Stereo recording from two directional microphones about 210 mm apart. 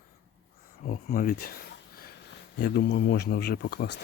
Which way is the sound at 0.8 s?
40° left (ahead or behind).